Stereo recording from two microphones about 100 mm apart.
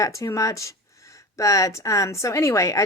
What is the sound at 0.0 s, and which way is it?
Speech, 30° left (ahead or behind).